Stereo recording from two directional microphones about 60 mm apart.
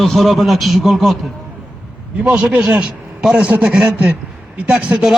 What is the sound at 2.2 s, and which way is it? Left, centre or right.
Speech, centre.